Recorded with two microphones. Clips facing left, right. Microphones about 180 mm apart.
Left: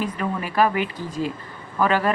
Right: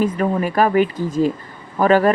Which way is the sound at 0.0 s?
45° right (ahead or behind).